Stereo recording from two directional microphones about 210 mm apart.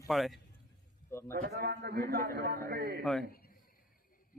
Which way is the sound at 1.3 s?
45° right (ahead or behind).